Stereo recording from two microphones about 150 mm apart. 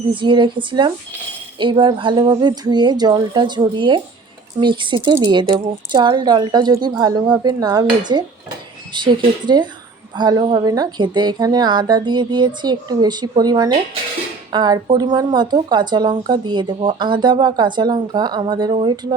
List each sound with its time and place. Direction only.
0.1 s a woman's voice: 35° right (ahead or behind)